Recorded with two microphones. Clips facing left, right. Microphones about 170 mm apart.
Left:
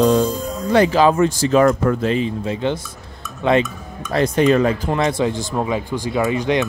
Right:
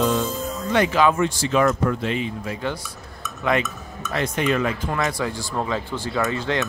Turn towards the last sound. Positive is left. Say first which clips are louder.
# left 5 dB
turn(degrees=15)  # may be behind; listen again after turning